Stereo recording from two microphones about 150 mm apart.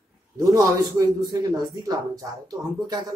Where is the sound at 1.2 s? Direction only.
25° right (ahead or behind).